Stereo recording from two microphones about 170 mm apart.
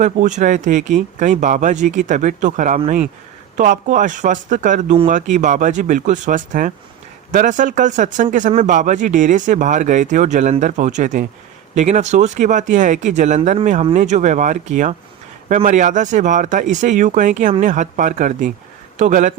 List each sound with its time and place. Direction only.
0.0 s speech: 45° right (ahead or behind)